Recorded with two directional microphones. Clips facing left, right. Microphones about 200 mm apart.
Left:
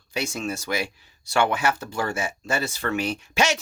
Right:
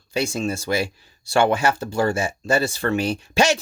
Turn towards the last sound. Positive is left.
turn(degrees=-30)  # may be behind; listen again after turning